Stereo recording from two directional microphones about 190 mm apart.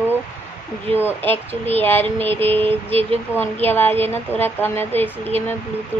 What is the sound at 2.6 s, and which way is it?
Vehicle, 30° right (ahead or behind).